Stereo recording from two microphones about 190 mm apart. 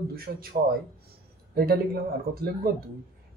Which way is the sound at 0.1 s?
50° right (ahead or behind).